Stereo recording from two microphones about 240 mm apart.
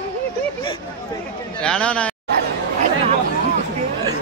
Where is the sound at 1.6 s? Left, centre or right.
Centre.